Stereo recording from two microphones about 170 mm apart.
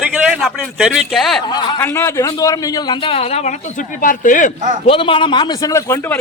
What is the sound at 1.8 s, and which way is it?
A man's voice, 15° left (ahead or behind).